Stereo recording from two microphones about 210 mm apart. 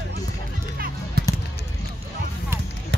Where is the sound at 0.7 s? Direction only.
45° right (ahead or behind).